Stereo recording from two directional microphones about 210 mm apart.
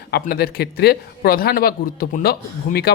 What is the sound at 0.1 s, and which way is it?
Speech, 50° left (ahead or behind).